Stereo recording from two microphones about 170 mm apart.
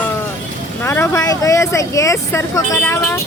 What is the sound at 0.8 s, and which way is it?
Speech, 15° left (ahead or behind).